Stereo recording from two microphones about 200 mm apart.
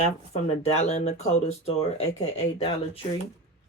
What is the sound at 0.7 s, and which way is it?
Speech, 35° left (ahead or behind).